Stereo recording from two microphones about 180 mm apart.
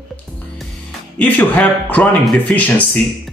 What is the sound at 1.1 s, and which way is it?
A man's voice, 10° left (ahead or behind).